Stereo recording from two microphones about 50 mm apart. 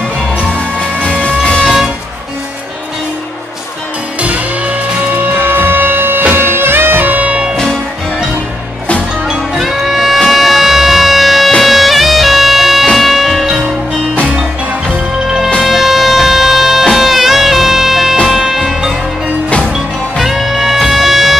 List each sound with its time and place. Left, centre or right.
1.0 s music: left
4.2 s music: right
5.3 s music: right
9.3 s music: centre
15.2 s music: centre